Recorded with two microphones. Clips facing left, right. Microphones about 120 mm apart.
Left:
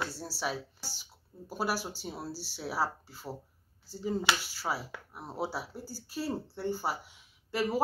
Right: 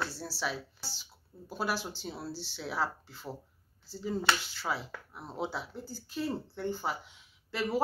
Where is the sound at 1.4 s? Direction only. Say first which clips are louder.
Left 1 dB; 10° left (ahead or behind).